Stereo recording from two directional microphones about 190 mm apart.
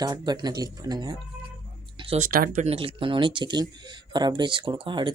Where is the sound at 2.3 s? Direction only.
50° right (ahead or behind).